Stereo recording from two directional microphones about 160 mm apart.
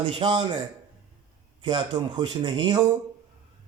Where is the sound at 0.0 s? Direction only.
30° right (ahead or behind).